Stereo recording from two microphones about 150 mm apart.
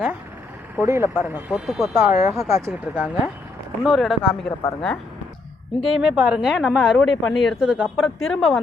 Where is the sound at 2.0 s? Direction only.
15° right (ahead or behind); by 4.5 s centre (ahead or behind).